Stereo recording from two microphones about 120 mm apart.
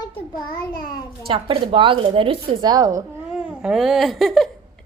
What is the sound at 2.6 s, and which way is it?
Speech, 30° right (ahead or behind).